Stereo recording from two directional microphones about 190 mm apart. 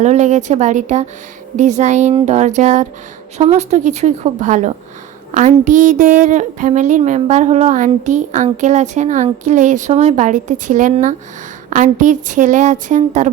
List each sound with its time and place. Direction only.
0.0 s a woman's voice: 40° right (ahead or behind)